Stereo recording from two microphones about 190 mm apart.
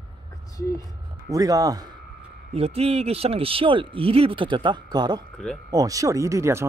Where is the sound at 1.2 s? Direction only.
15° right (ahead or behind).